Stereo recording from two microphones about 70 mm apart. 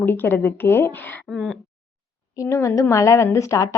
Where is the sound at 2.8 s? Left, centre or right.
Left.